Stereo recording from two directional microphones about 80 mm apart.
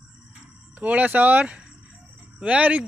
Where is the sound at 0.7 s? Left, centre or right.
Centre.